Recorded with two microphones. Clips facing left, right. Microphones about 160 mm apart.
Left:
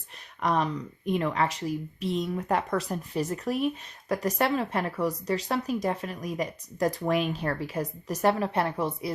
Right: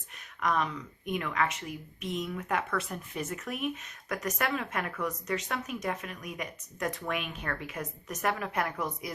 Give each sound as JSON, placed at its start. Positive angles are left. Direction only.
{"t": 0.3, "sound": "speech", "side_deg": 35}